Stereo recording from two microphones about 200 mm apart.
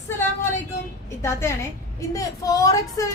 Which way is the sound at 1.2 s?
15° left (ahead or behind).